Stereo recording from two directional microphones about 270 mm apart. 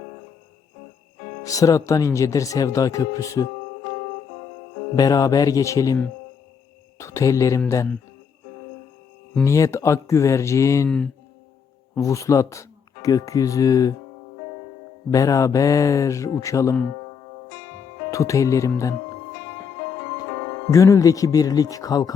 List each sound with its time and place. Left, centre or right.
1.5 s speech: centre
4.9 s speech: centre
9.3 s speech: centre
15.1 s speech: centre
18.1 s speech: centre
20.7 s speech: centre